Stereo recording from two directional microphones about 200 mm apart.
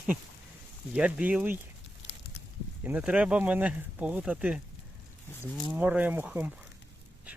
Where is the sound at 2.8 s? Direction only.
5° right (ahead or behind).